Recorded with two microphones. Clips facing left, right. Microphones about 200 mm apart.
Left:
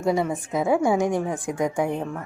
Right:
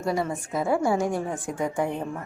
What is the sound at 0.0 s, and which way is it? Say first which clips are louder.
A woman's voice: left 4 dB; 20° left (ahead or behind).